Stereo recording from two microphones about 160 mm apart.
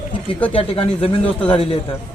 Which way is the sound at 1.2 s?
10° left (ahead or behind).